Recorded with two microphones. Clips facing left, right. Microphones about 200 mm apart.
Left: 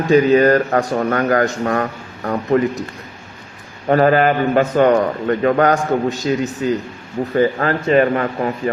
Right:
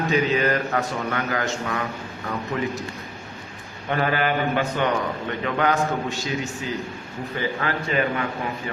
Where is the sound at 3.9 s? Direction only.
40° left (ahead or behind).